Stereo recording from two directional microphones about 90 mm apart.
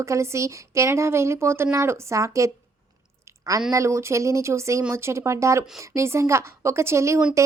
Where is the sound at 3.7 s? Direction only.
35° right (ahead or behind).